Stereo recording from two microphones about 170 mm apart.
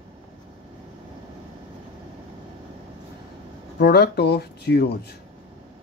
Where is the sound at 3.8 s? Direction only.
70° left (ahead or behind).